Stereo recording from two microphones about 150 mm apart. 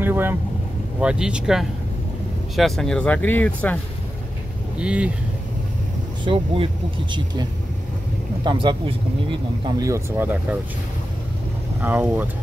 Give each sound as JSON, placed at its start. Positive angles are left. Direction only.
{"t": 0.0, "sound": "speech", "side_deg": -15}
{"t": 4.7, "sound": "speech", "side_deg": -5}
{"t": 6.2, "sound": "speech", "side_deg": -35}
{"t": 8.5, "sound": "speech", "side_deg": -35}
{"t": 9.7, "sound": "speech", "side_deg": -25}
{"t": 11.8, "sound": "speech", "side_deg": -10}